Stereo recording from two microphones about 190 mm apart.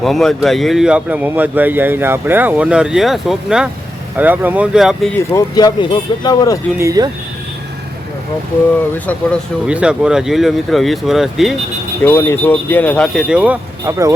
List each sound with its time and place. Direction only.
0.0 s speech: centre (ahead or behind)
5.3 s speech: 20° left (ahead or behind)
6.7 s speech: 15° right (ahead or behind)
9.6 s speech: 5° right (ahead or behind)
12.0 s speech: 10° left (ahead or behind); by 14.1 s 10° right (ahead or behind)